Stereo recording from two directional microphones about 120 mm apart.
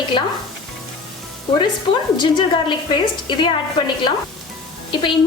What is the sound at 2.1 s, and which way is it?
Speech, 40° left (ahead or behind).